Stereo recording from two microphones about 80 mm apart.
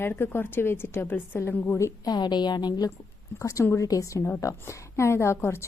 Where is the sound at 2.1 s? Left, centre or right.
Left.